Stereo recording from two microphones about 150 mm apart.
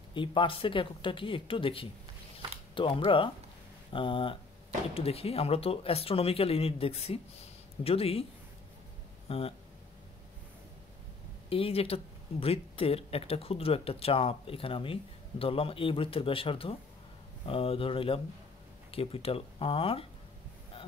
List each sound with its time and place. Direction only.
0.1 s speech: 35° left (ahead or behind)
2.3 s a sound: 35° left (ahead or behind)
3.9 s speech: 35° left (ahead or behind)
9.3 s speech: 40° left (ahead or behind)
11.4 s speech: 40° left (ahead or behind)